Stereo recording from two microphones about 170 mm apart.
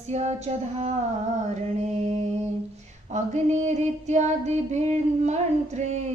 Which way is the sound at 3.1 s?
45° right (ahead or behind).